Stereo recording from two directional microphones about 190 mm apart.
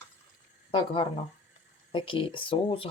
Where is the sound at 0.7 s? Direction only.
25° left (ahead or behind).